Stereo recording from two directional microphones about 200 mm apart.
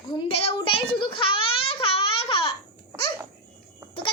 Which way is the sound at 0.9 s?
25° left (ahead or behind).